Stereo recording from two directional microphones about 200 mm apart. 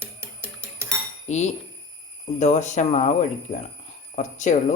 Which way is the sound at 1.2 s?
35° left (ahead or behind).